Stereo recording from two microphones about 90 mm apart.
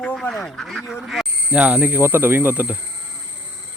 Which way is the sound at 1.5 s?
15° right (ahead or behind).